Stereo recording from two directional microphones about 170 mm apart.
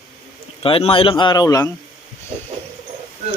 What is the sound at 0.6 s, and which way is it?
Speech, 35° left (ahead or behind).